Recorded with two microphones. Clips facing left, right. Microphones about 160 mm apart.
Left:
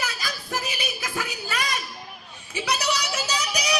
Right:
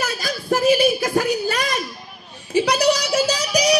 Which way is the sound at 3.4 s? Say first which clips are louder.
Right 9 dB; 35° right (ahead or behind).